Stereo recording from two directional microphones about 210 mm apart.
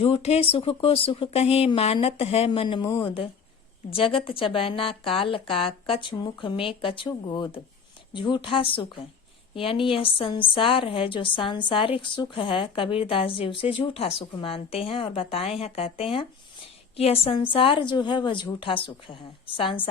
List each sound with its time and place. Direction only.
0.0 s a woman's voice: 30° left (ahead or behind)